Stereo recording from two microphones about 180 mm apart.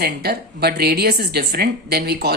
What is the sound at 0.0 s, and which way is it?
Speech, 60° right (ahead or behind).